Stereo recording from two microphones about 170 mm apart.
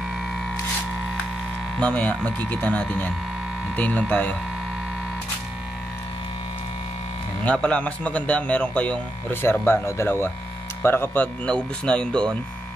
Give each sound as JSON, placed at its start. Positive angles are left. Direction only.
{"t": 1.8, "sound": "speech", "side_deg": 5}
{"t": 7.4, "sound": "speech", "side_deg": 5}